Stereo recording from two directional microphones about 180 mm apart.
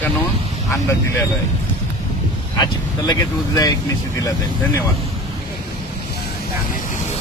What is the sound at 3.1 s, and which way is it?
Speech, 20° left (ahead or behind).